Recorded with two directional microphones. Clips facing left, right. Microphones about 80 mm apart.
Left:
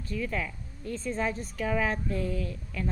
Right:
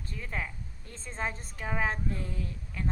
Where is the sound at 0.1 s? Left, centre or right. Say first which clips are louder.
Left 6 dB; right.